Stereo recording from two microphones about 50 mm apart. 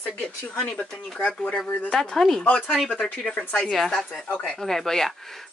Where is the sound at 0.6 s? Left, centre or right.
Left.